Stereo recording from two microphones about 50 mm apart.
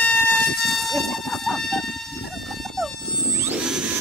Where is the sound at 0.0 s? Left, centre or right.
Left.